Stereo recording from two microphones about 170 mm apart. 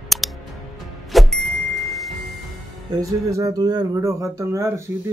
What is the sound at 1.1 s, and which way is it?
Car, centre (ahead or behind).